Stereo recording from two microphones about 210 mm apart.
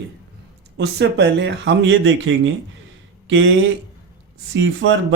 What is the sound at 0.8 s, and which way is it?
Speech, 55° right (ahead or behind).